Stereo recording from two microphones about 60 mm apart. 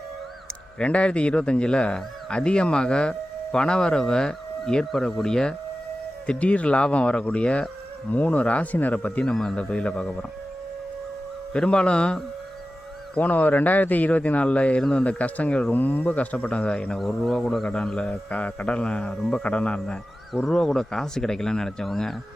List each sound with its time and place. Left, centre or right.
0.8 s speech: centre
6.2 s speech: left
9.2 s speech: centre
9.6 s speech: centre
11.5 s speech: centre
13.1 s speech: left
17.0 s speech: centre
20.5 s speech: centre